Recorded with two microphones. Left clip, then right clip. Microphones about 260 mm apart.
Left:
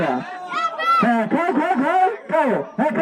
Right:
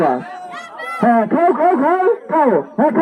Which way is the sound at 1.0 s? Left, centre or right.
Centre.